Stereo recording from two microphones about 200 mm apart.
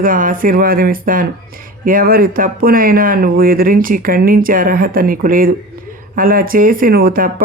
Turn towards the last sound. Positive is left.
turn(degrees=-45)  # may be behind; listen again after turning